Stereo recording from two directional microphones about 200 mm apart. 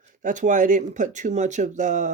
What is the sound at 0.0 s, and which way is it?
Speech, 40° right (ahead or behind).